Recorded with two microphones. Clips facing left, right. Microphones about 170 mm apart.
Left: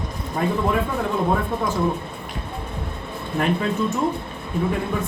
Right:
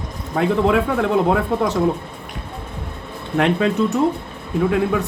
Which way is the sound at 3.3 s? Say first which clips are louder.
Right 5 dB; 75° right (ahead or behind).